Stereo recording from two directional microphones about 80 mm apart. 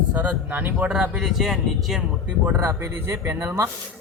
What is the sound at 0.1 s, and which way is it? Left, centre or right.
Speech, centre.